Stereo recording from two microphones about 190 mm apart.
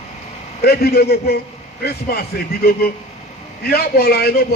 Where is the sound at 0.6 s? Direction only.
55° left (ahead or behind).